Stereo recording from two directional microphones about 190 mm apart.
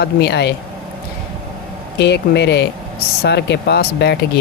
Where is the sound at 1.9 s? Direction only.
60° left (ahead or behind).